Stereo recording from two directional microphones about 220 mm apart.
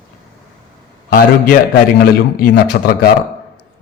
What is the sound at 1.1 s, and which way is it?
Speech, 40° left (ahead or behind).